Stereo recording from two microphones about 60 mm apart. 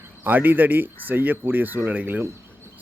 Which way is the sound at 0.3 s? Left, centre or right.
Right.